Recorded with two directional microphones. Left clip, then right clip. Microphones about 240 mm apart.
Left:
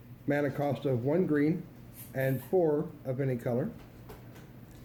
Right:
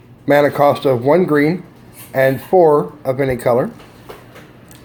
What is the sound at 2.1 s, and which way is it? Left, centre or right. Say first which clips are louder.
A man's voice: right 17 dB; centre.